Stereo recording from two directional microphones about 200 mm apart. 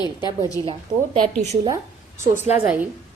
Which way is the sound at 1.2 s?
35° right (ahead or behind).